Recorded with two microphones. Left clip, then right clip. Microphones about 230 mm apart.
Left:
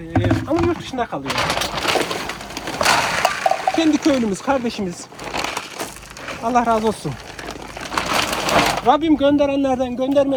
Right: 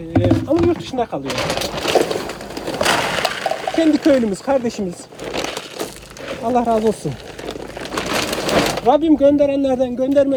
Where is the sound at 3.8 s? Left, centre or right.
Left.